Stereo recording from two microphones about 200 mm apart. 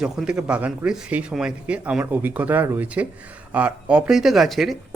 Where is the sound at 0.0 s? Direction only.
5° right (ahead or behind).